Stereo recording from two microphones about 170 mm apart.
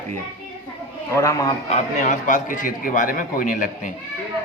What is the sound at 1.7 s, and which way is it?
A man's voice, 50° left (ahead or behind).